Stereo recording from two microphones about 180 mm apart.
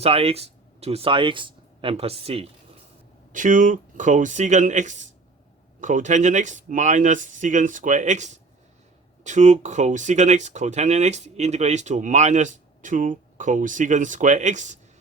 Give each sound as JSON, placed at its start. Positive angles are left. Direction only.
{"t": 0.0, "sound": "speech", "side_deg": -30}
{"t": 3.3, "sound": "speech", "side_deg": -45}